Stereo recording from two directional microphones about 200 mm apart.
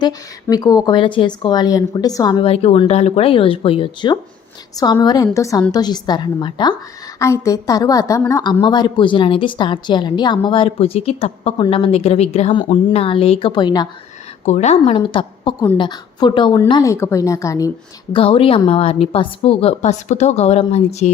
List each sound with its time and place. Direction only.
0.0 s a woman's voice: 20° left (ahead or behind)
14.4 s a woman's voice: 35° left (ahead or behind); by 17.7 s 15° left (ahead or behind)
18.1 s a woman's voice: 25° left (ahead or behind)